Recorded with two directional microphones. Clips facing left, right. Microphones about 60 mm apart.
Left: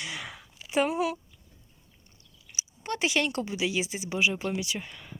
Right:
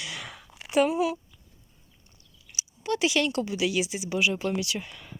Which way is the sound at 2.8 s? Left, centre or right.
Left.